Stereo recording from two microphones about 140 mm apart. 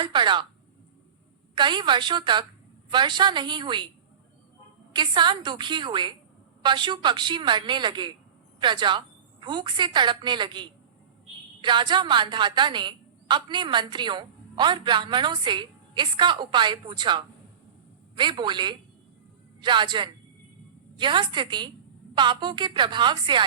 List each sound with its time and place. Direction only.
0.0 s a woman's voice: 35° right (ahead or behind)
1.5 s a woman's voice: 35° right (ahead or behind)
4.9 s a woman's voice: 35° right (ahead or behind)